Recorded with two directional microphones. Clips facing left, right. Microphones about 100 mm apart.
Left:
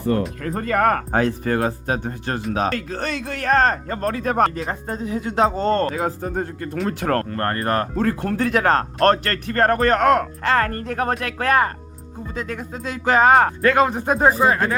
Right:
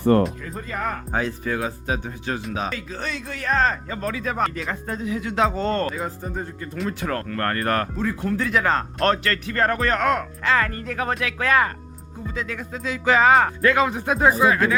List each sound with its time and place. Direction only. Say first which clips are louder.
0.1 s speech: right 4 dB; 55° right (ahead or behind)
0.4 s speech: left 9 dB; 65° left (ahead or behind)
4.5 s speech: left 2 dB; 35° left (ahead or behind)
5.9 s speech: left 5 dB; 70° left (ahead or behind)
7.3 s speech: left 1 dB; 30° left (ahead or behind)
7.9 s speech: left 3 dB; 60° left (ahead or behind); by 14.8 s 40° left (ahead or behind)